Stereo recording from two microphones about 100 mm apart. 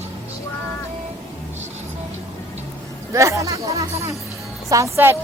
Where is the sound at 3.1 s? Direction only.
30° right (ahead or behind).